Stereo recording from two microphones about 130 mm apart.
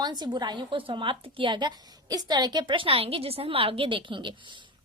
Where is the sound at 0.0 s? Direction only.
35° right (ahead or behind).